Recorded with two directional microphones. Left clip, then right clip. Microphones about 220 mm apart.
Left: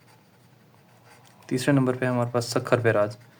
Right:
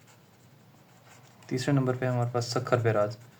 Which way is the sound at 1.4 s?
30° left (ahead or behind).